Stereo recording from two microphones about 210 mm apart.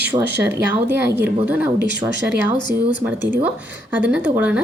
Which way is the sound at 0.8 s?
10° right (ahead or behind).